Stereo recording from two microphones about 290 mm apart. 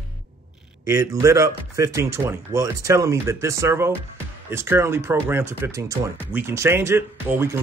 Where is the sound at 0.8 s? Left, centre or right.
Centre.